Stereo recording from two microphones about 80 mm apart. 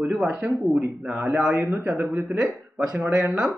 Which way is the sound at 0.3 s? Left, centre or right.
Right.